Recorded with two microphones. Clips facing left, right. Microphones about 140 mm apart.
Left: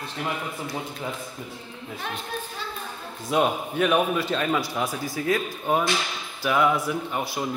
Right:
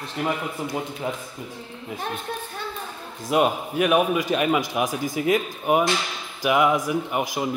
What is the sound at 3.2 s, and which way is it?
A man's voice, 10° right (ahead or behind).